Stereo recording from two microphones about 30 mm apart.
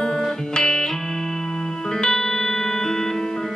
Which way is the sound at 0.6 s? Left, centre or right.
Centre.